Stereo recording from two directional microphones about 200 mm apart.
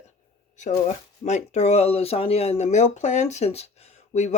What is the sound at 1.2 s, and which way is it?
Speech, 35° left (ahead or behind).